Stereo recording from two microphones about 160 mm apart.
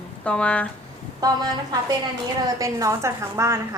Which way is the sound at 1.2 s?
20° right (ahead or behind).